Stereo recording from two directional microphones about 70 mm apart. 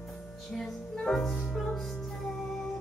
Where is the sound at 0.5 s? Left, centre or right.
Centre.